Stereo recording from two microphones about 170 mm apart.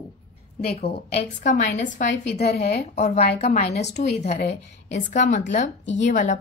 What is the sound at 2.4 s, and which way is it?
Speech, 75° left (ahead or behind).